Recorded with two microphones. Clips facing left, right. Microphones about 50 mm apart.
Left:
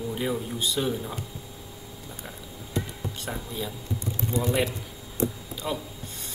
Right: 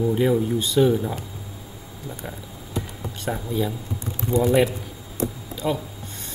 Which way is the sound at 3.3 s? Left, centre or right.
Centre.